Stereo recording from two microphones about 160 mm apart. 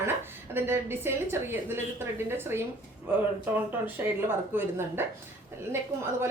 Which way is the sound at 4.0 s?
15° right (ahead or behind).